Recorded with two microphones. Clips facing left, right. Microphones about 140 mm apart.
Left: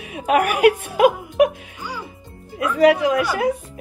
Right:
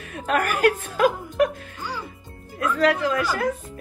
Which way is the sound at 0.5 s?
10° left (ahead or behind).